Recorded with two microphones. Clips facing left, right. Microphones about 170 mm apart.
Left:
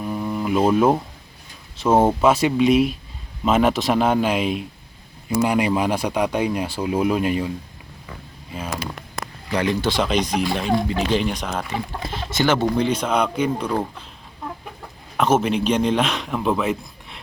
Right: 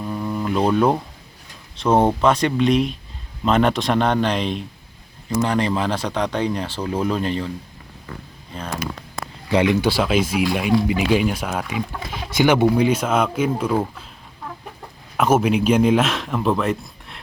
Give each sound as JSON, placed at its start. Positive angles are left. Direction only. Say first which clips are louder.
{"t": 0.0, "sound": "a sound", "louder": "even", "side_deg": 10}
{"t": 1.7, "sound": "speech", "louder": "even", "side_deg": 5}
{"t": 8.5, "sound": "speech", "louder": "left 1 dB", "side_deg": 5}
{"t": 9.5, "sound": "speech", "louder": "right 4 dB", "side_deg": -20}
{"t": 9.9, "sound": "speech", "louder": "right 1 dB", "side_deg": -5}
{"t": 15.2, "sound": "speech", "louder": "right 1 dB", "side_deg": -5}